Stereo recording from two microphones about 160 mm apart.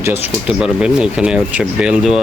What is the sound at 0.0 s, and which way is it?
Speech, 15° right (ahead or behind).